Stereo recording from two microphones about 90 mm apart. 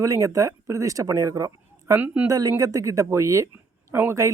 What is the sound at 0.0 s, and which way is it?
A man's voice, 35° right (ahead or behind).